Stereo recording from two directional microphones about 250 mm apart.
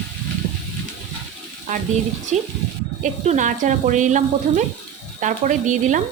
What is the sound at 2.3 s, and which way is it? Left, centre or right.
Speech, right.